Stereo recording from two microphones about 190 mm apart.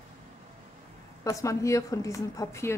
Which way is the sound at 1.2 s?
15° left (ahead or behind).